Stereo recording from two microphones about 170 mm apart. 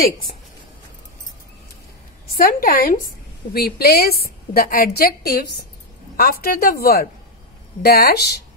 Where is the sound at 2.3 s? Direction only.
55° left (ahead or behind).